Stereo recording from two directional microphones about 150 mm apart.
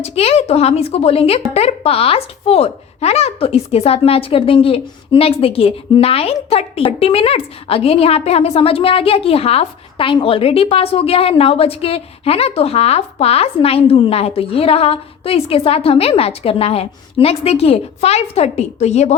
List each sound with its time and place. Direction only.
0.0 s a woman's voice: 40° left (ahead or behind)